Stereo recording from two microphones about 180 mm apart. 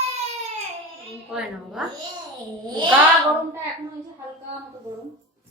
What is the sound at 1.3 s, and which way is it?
Speech, 5° right (ahead or behind).